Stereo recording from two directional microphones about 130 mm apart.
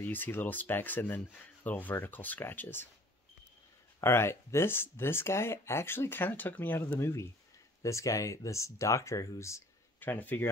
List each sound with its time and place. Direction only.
0.0 s speech: 15° left (ahead or behind)
4.0 s speech: 20° left (ahead or behind)